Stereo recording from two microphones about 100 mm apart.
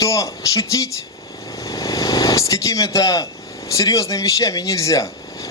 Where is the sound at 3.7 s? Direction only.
35° left (ahead or behind).